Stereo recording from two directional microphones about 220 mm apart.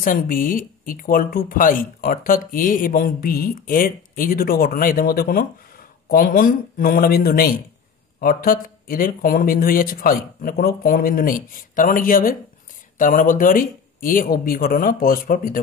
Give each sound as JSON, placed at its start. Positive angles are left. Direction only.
{"t": 0.0, "sound": "speech", "side_deg": 40}